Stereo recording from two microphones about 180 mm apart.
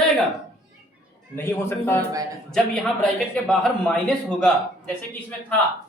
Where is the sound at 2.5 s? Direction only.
5° left (ahead or behind).